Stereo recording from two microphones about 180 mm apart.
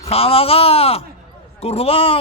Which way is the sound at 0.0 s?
35° left (ahead or behind).